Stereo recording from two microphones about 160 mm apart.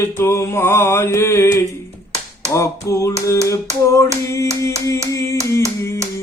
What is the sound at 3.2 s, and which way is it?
Mantra, 20° left (ahead or behind).